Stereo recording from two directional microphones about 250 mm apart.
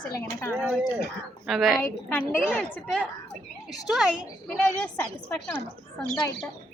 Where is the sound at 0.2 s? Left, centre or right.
Centre.